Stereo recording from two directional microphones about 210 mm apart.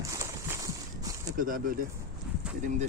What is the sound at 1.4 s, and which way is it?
Speech, 40° right (ahead or behind).